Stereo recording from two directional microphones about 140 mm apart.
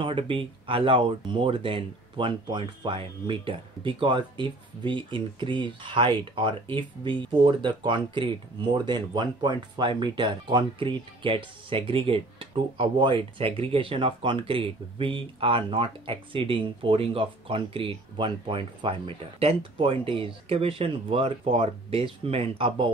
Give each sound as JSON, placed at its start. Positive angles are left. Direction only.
{"t": 0.0, "sound": "speech", "side_deg": -40}